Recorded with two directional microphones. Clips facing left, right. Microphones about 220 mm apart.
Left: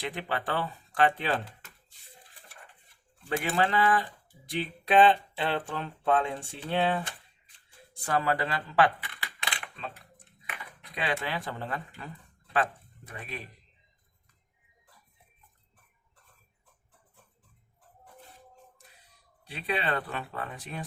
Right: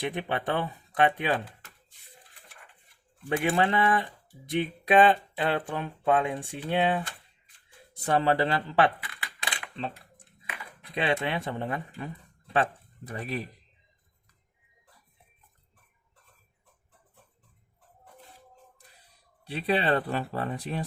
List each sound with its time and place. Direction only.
0.0 s speech: 20° right (ahead or behind)
3.2 s speech: 20° right (ahead or behind)
9.4 s a sound: 30° right (ahead or behind)
10.8 s speech: 25° right (ahead or behind)
13.1 s speech: 40° right (ahead or behind)
19.5 s speech: 35° right (ahead or behind)